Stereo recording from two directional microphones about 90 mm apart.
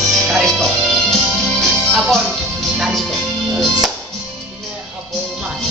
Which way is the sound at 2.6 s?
Centre (ahead or behind).